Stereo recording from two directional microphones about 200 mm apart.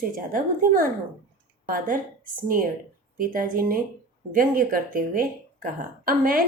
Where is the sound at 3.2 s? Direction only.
45° right (ahead or behind).